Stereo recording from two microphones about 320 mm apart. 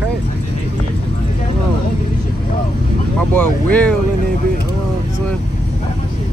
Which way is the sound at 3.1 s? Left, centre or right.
Centre.